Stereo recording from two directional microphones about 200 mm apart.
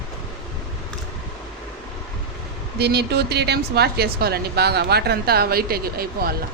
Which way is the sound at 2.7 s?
55° right (ahead or behind).